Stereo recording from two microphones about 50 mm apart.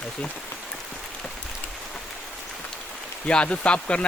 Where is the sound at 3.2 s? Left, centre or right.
Left.